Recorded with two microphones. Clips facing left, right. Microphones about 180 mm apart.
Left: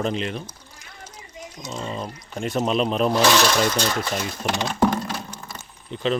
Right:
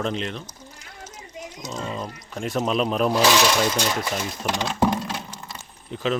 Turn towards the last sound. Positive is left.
turn(degrees=0)  # may be behind; listen again after turning